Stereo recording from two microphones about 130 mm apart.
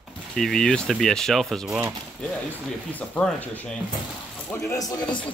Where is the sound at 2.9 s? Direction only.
10° left (ahead or behind).